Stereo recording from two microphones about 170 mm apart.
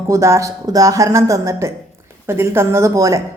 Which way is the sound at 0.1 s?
15° right (ahead or behind).